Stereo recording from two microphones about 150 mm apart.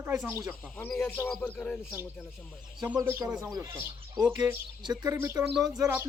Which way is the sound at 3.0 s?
20° right (ahead or behind).